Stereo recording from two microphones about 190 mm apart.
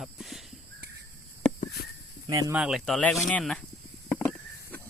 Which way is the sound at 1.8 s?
50° left (ahead or behind).